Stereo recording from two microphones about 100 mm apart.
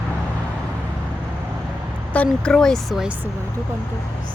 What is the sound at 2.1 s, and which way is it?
Speech, 15° left (ahead or behind).